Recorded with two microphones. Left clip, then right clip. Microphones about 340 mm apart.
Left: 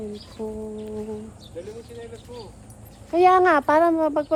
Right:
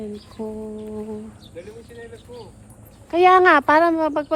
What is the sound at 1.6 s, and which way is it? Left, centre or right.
Speech, centre.